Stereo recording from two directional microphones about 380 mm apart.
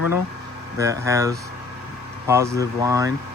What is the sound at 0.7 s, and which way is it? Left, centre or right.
A man's voice, centre.